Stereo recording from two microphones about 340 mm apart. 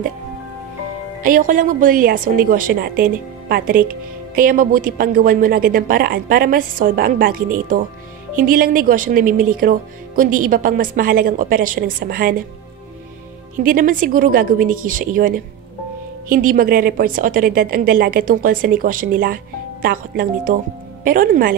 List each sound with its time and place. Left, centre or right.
1.2 s a woman's voice: right
13.6 s a woman's voice: right